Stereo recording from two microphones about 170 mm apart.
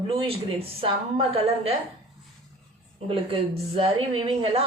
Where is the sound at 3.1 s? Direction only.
35° right (ahead or behind).